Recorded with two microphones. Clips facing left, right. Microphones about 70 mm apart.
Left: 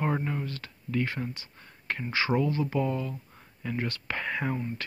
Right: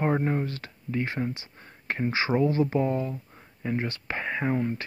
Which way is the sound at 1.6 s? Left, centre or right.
Right.